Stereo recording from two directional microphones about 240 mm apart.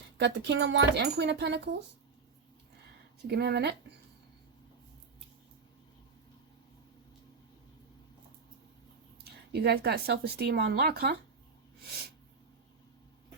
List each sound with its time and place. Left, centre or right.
0.2 s speech: right
3.2 s speech: right
9.5 s speech: right